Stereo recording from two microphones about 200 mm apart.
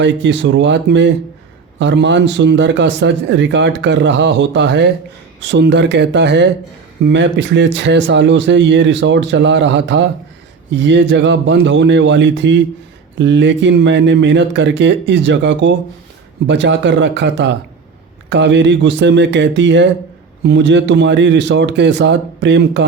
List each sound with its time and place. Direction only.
0.0 s a man's voice: 65° right (ahead or behind)